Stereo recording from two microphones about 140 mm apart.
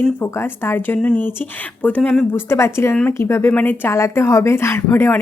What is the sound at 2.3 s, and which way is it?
A woman's voice, 20° left (ahead or behind).